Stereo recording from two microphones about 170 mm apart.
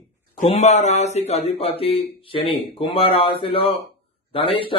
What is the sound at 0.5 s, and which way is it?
Speech, 40° left (ahead or behind).